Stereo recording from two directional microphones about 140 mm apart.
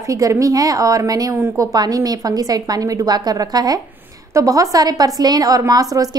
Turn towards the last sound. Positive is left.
turn(degrees=-25)  # may be behind; listen again after turning